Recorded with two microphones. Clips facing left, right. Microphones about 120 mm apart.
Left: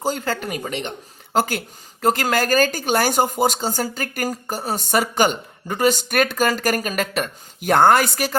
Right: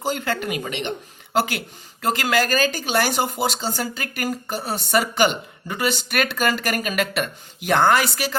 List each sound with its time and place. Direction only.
0.0 s speech: 40° left (ahead or behind)